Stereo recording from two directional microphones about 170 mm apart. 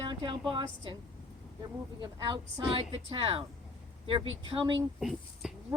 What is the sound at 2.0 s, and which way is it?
Speech, 25° right (ahead or behind).